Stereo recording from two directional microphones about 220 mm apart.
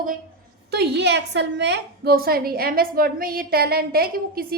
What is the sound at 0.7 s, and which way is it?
A woman's voice, 50° right (ahead or behind).